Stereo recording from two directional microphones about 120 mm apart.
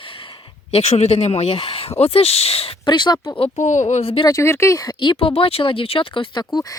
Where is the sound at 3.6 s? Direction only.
90° left.